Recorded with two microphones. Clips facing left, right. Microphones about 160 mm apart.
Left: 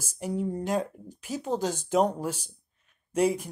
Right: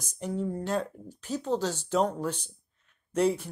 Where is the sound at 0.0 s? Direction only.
10° left (ahead or behind).